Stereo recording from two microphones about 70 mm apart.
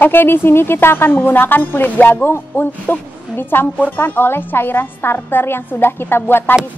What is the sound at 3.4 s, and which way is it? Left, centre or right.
A woman's voice, left.